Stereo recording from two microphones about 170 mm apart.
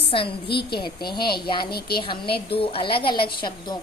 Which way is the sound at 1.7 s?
65° left (ahead or behind).